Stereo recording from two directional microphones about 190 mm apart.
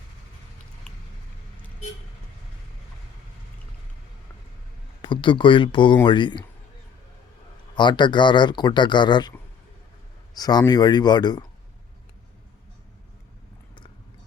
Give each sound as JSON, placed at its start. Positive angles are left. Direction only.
{"t": 5.0, "sound": "speech", "side_deg": 25}
{"t": 7.8, "sound": "speech", "side_deg": 25}
{"t": 10.3, "sound": "speech", "side_deg": 20}